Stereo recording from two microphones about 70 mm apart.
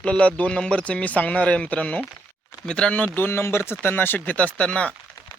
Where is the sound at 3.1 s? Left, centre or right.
Left.